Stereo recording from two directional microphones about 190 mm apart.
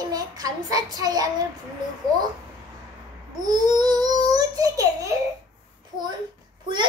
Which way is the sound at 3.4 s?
20° right (ahead or behind).